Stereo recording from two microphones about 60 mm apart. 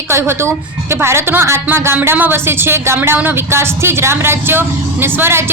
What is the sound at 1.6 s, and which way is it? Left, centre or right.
Music, right.